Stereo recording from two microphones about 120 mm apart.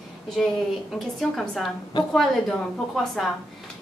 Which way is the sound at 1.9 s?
35° left (ahead or behind).